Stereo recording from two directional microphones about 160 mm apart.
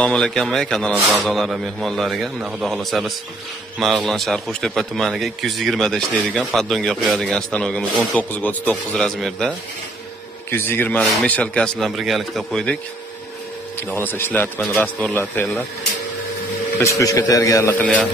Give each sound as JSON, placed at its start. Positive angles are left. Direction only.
{"t": 0.0, "sound": "a man's voice", "side_deg": 5}
{"t": 10.5, "sound": "a man's voice", "side_deg": 15}
{"t": 13.8, "sound": "a man's voice", "side_deg": 15}
{"t": 17.0, "sound": "a man's voice", "side_deg": 20}